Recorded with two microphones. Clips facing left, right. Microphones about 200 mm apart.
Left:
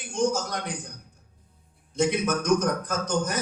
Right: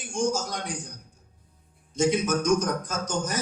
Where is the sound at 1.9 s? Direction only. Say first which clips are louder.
Right 1 dB; 60° left (ahead or behind).